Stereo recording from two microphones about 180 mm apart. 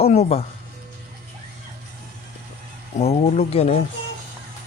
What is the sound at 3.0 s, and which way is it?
Speech, 35° left (ahead or behind).